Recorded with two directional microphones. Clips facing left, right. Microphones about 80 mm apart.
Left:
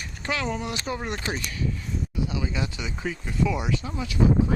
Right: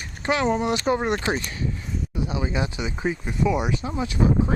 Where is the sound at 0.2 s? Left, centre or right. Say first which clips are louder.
Right 7 dB; right.